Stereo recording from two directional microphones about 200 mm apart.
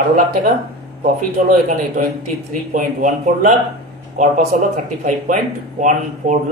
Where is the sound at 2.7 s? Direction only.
35° right (ahead or behind).